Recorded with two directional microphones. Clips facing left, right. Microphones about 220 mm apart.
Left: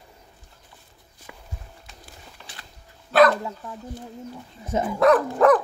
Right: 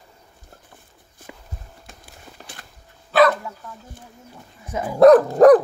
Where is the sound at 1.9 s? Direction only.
50° right (ahead or behind).